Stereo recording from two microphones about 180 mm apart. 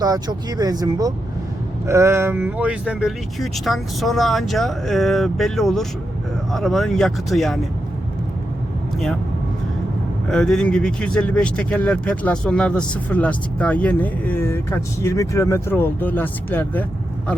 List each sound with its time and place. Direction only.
0.0 s speech: 20° right (ahead or behind); by 7.6 s centre (ahead or behind)
10.2 s speech: 5° left (ahead or behind)